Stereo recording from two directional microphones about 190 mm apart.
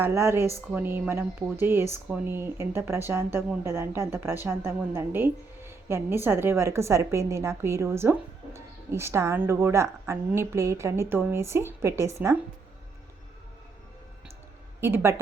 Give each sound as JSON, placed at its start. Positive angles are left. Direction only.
{"t": 0.0, "sound": "a woman's voice", "side_deg": -15}
{"t": 14.8, "sound": "a woman's voice", "side_deg": -10}